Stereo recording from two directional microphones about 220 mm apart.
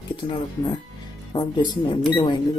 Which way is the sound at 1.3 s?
20° left (ahead or behind).